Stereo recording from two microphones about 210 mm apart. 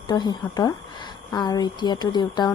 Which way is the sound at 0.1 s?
20° left (ahead or behind).